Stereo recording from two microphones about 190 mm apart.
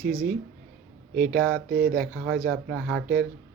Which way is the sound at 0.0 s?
45° right (ahead or behind).